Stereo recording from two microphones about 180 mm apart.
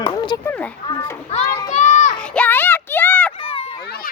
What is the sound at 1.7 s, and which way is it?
Child singing, 40° left (ahead or behind).